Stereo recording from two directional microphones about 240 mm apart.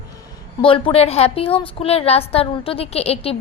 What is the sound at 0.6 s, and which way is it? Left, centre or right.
A woman's voice, left.